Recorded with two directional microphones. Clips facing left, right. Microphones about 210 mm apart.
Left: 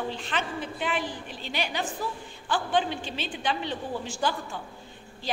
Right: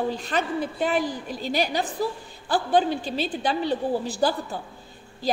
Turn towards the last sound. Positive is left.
turn(degrees=-35)  # may be behind; listen again after turning